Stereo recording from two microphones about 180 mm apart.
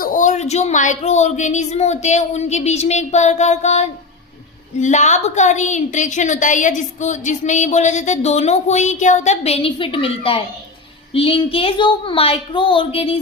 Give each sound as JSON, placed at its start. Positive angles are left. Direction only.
{"t": 0.0, "sound": "a woman's voice", "side_deg": 45}